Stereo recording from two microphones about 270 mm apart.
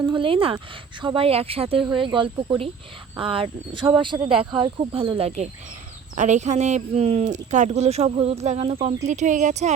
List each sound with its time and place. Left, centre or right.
0.0 s speech: centre
1.8 s speech: centre
2.0 s speech: centre